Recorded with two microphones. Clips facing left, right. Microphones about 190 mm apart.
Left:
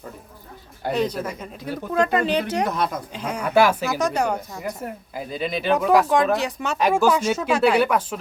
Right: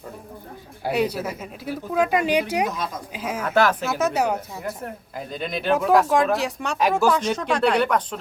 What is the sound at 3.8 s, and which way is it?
Speech, 5° right (ahead or behind).